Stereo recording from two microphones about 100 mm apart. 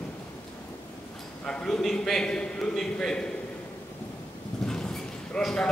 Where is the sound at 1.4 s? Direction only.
10° left (ahead or behind).